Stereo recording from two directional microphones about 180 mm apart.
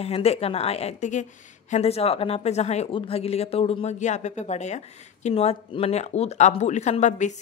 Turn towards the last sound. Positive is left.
turn(degrees=40)  # may be behind; listen again after turning